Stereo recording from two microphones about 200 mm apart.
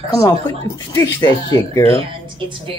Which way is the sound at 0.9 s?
15° left (ahead or behind).